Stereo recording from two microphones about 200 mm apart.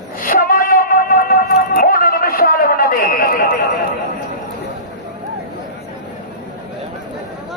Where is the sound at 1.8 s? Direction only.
45° left (ahead or behind).